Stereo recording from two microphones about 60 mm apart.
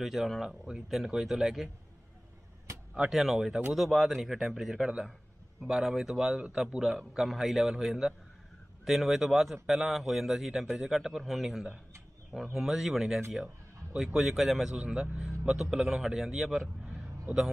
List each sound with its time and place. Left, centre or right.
0.0 s a man's voice: centre
3.1 s a man's voice: centre
14.8 s a man's voice: centre